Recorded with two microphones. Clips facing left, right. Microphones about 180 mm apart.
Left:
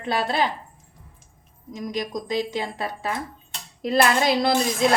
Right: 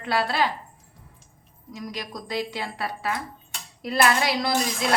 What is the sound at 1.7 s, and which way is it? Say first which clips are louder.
A woman's voice: left 6 dB; 20° left (ahead or behind).